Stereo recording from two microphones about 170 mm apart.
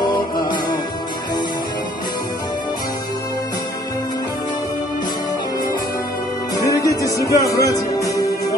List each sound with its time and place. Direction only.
0.0 s music: 25° left (ahead or behind)
6.5 s music: 20° left (ahead or behind)